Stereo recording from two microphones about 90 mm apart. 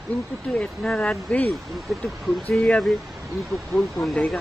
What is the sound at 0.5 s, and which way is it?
Speech, 15° left (ahead or behind).